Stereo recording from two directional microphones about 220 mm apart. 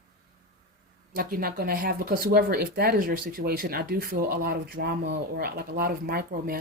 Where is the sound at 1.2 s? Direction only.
40° right (ahead or behind).